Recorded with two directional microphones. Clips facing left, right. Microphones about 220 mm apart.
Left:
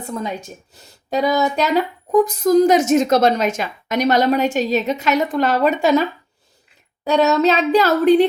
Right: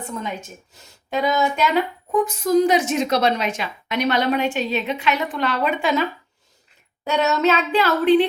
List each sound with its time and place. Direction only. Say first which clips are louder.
0.0 s a woman's voice: left 3 dB; 35° left (ahead or behind)